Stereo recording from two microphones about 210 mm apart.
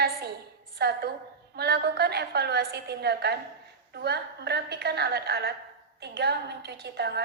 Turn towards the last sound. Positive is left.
turn(degrees=-50)  # may be behind; listen again after turning